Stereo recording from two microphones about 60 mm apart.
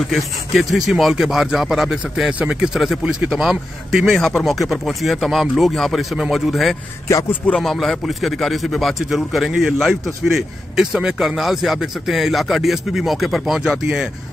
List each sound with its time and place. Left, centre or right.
0.1 s a man's voice: centre
2.3 s speech: centre
3.3 s a man's voice: centre
4.2 s a man's voice: centre